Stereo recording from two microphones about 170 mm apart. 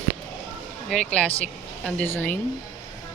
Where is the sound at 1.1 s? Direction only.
5° left (ahead or behind).